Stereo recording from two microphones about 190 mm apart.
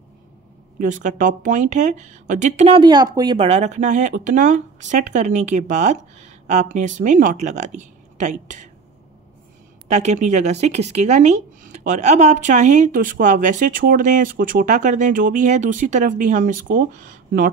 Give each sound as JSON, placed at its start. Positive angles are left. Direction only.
{"t": 0.7, "sound": "speech", "side_deg": -40}
{"t": 3.3, "sound": "speech", "side_deg": -35}
{"t": 9.8, "sound": "speech", "side_deg": -40}